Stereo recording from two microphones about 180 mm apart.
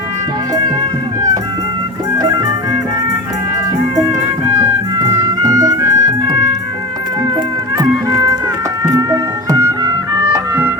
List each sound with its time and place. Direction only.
4.9 s music: 20° right (ahead or behind)
9.0 s music: 20° right (ahead or behind)